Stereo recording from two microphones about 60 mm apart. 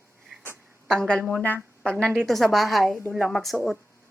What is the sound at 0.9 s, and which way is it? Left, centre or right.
A woman's voice, centre.